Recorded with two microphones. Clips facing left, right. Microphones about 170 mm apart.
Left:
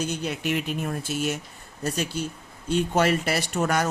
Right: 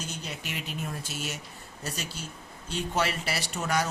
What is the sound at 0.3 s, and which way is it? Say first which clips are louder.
Speech: left 10 dB; 55° left (ahead or behind).